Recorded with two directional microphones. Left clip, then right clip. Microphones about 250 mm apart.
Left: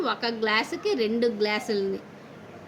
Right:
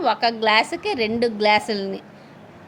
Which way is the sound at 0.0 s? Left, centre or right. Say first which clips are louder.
Right 7 dB; right.